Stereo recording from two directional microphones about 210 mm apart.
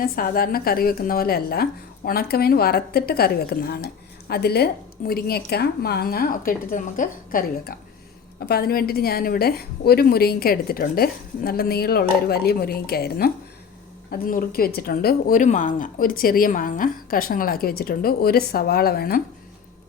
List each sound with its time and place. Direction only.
0.0 s speech: 45° left (ahead or behind)